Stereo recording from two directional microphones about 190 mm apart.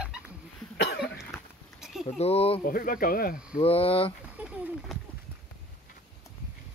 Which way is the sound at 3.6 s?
30° left (ahead or behind).